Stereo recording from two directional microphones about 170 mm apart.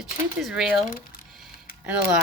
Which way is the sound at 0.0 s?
5° right (ahead or behind).